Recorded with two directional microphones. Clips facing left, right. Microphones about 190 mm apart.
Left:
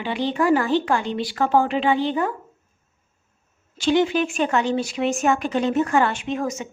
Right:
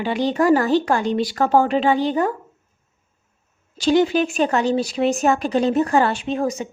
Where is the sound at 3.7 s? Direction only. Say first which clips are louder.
Right 2 dB; 40° right (ahead or behind).